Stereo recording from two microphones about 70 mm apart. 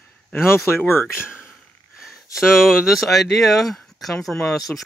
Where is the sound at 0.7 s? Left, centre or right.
Left.